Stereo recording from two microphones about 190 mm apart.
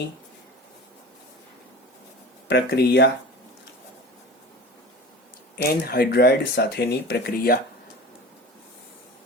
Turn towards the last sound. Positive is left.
turn(degrees=55)  # may be behind; listen again after turning